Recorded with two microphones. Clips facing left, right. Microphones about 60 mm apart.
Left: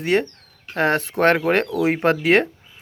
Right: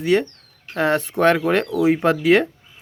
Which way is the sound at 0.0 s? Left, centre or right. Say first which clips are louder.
Right 2 dB; left.